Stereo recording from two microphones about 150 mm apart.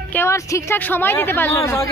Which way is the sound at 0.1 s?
15° left (ahead or behind).